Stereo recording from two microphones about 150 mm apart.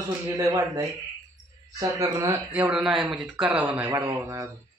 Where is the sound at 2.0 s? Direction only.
25° right (ahead or behind).